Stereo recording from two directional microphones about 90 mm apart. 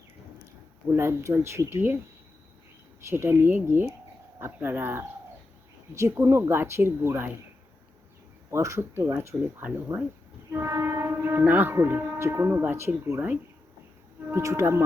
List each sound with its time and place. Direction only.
0.9 s speech: 30° right (ahead or behind)
3.1 s speech: 25° right (ahead or behind)
8.4 s speech: 35° right (ahead or behind)
14.3 s speech: 35° right (ahead or behind)